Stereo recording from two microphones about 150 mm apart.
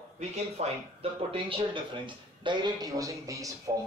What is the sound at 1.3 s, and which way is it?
A man's voice, 35° right (ahead or behind).